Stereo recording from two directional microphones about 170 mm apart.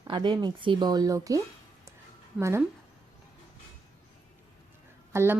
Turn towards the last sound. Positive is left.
turn(degrees=-15)  # may be behind; listen again after turning